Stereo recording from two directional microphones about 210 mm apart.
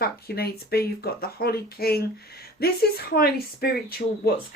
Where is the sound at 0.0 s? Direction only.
45° left (ahead or behind).